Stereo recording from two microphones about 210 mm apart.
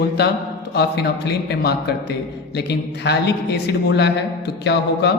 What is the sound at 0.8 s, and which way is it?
Speech, 50° left (ahead or behind).